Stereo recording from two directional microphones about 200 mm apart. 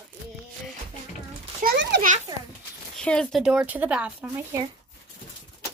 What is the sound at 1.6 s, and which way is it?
Children playing, 60° right (ahead or behind).